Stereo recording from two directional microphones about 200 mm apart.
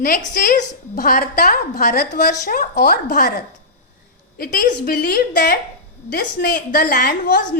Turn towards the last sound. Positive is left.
turn(degrees=50)  # may be behind; listen again after turning